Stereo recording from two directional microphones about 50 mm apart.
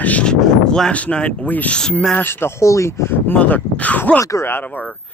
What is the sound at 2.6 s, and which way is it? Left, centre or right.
Speech, left.